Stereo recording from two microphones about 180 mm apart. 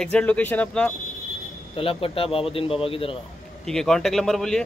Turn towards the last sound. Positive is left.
turn(degrees=5)  # may be behind; listen again after turning